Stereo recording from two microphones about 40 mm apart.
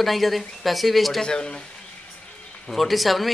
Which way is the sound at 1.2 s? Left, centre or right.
Left.